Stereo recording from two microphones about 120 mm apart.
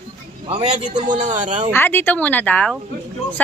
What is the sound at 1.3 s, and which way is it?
Speech, 80° right.